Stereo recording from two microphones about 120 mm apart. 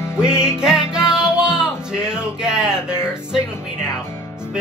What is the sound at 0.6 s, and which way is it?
Music, 5° right (ahead or behind).